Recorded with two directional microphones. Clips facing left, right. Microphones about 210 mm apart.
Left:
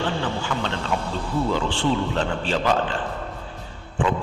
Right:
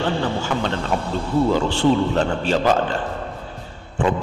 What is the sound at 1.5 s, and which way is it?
A man's voice, 40° right (ahead or behind).